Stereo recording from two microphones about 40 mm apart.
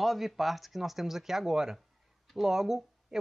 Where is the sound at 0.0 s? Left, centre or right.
Centre.